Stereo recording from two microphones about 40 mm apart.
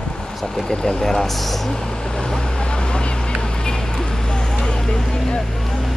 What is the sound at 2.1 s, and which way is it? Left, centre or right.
Vehicle, centre.